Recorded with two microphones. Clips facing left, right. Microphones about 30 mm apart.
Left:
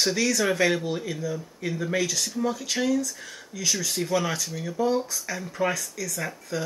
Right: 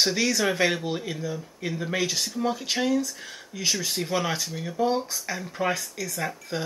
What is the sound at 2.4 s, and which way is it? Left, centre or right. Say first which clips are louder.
Speech: even; right.